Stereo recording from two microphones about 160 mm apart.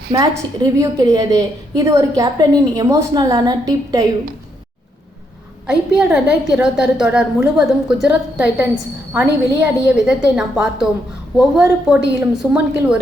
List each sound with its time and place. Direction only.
0.1 s a woman's voice: 25° right (ahead or behind)
5.6 s a woman's voice: 5° right (ahead or behind)
9.8 s a woman's voice: 5° right (ahead or behind)